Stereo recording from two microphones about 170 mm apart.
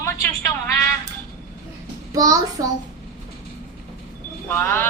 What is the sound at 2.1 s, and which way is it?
Speech, 20° right (ahead or behind).